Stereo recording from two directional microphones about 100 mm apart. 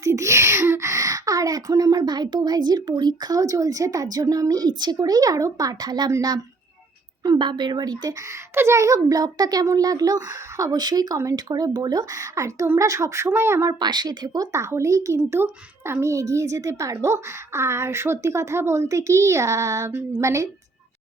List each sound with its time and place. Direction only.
0.0 s a woman's voice: 30° right (ahead or behind)
7.3 s a woman's voice: 50° right (ahead or behind)
8.5 s a child's voice: 30° right (ahead or behind)
13.7 s a woman's voice: 45° right (ahead or behind)
14.5 s a child's voice: 30° right (ahead or behind)